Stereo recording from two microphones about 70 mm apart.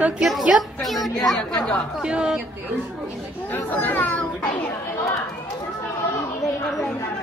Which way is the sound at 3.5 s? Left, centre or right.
Left.